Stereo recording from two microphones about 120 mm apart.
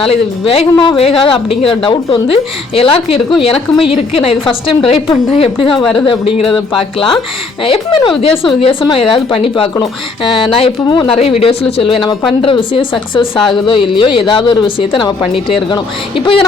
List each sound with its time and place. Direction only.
0.0 s speech: 50° left (ahead or behind)
7.6 s speech: 50° left (ahead or behind)